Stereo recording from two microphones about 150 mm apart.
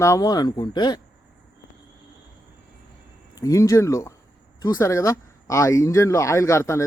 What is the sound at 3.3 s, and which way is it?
Speech, 20° left (ahead or behind).